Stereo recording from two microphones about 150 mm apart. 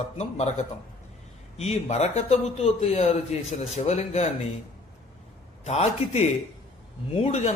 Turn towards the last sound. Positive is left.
turn(degrees=45)  # may be behind; listen again after turning